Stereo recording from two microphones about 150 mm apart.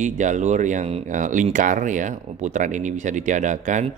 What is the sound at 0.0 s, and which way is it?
Speech, 55° right (ahead or behind).